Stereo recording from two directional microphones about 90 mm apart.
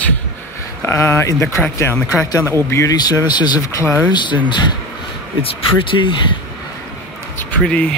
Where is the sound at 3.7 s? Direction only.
30° left (ahead or behind).